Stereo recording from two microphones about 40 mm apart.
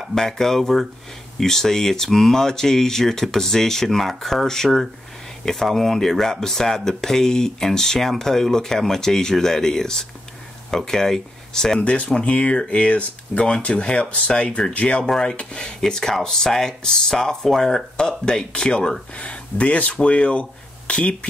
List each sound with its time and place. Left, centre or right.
0.1 s speech: centre
11.8 s speech: left
15.0 s speech: centre
15.8 s speech: centre; by 21.3 s left